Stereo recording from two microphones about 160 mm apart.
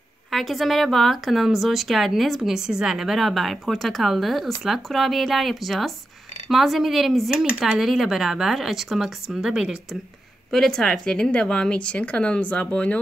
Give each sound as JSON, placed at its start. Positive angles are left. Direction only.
{"t": 0.3, "sound": "a woman's voice", "side_deg": 0}